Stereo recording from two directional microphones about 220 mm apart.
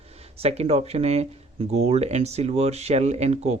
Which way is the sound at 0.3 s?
30° right (ahead or behind).